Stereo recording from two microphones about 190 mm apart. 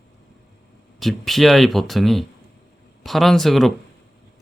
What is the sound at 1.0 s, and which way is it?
Speech, centre (ahead or behind).